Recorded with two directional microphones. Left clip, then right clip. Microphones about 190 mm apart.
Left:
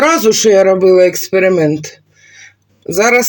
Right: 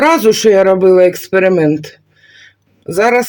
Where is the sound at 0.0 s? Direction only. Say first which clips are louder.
Right 1 dB; 15° right (ahead or behind).